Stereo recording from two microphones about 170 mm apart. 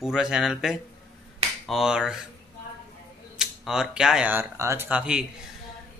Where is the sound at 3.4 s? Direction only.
5° right (ahead or behind).